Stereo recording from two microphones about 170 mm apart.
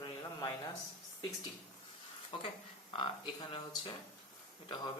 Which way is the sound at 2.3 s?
30° left (ahead or behind).